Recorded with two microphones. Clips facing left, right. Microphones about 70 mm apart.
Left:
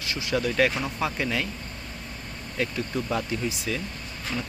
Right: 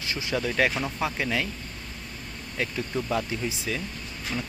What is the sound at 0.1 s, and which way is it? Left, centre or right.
Speech, right.